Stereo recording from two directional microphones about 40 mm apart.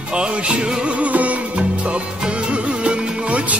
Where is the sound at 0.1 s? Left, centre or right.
Right.